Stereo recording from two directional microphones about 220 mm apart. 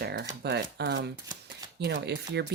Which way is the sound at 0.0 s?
50° right (ahead or behind).